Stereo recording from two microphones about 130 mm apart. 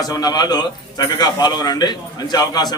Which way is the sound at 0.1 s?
30° left (ahead or behind).